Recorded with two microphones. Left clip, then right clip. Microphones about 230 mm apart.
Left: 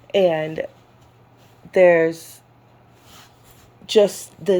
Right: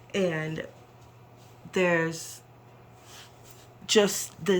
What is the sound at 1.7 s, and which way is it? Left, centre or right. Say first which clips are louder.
Speech: left 12 dB; right.